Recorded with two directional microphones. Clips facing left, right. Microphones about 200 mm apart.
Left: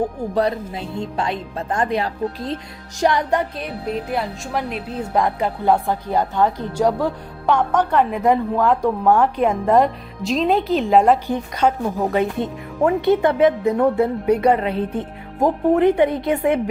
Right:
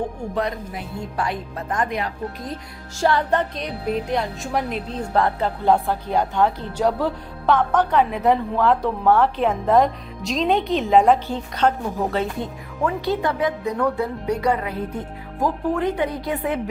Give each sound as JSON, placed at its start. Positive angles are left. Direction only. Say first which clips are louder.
{"t": 0.3, "sound": "speech", "louder": "left 6 dB", "side_deg": 30}
{"t": 3.0, "sound": "a woman's voice", "louder": "left 1 dB", "side_deg": 15}
{"t": 11.3, "sound": "speech", "louder": "left 2 dB", "side_deg": 15}